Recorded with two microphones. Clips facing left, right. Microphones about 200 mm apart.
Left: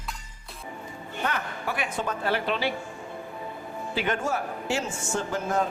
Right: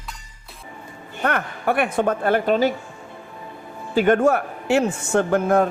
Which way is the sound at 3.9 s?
55° right (ahead or behind).